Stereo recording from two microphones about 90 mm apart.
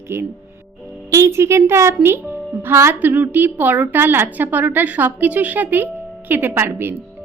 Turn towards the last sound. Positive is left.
turn(degrees=-25)  # may be behind; listen again after turning